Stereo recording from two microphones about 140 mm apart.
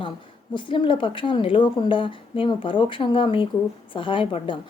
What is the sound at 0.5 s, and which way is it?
Speech, 35° left (ahead or behind).